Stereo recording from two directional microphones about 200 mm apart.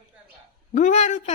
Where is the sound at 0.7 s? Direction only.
35° left (ahead or behind).